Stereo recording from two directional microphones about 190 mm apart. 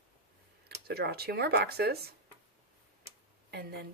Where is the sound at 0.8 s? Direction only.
55° right (ahead or behind).